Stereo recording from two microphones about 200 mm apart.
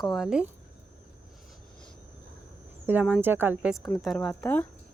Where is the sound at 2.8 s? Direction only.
5° right (ahead or behind).